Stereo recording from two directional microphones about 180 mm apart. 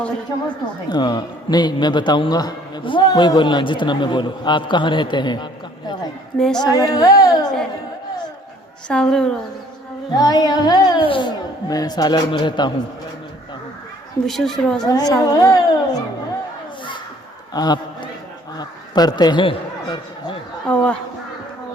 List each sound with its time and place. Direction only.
0.9 s a man's voice: 25° left (ahead or behind)
6.3 s a woman's voice: 5° left (ahead or behind)
6.6 s singing: 20° left (ahead or behind)
8.9 s a woman's voice: 5° left (ahead or behind)
10.2 s a man's voice: 20° left (ahead or behind)
14.3 s a woman's voice: centre (ahead or behind)
14.8 s a man's voice: 20° left (ahead or behind)
17.5 s a sound: 25° left (ahead or behind)
18.5 s a man's voice: 20° left (ahead or behind)
20.7 s a woman's voice: 5° left (ahead or behind)